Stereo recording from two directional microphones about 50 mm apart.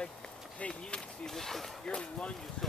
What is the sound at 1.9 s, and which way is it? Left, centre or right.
Speech, left.